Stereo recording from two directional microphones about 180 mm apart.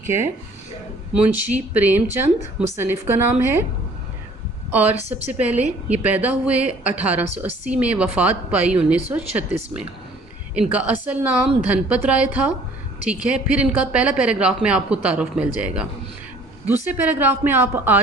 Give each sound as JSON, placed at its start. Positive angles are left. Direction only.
{"t": 0.0, "sound": "a woman's voice", "side_deg": -15}
{"t": 4.7, "sound": "a woman's voice", "side_deg": -10}